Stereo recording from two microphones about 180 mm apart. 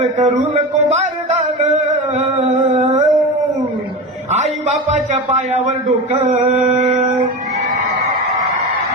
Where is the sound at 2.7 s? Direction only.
35° right (ahead or behind).